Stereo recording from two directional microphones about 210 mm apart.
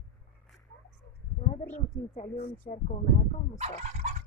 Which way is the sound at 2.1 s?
30° left (ahead or behind).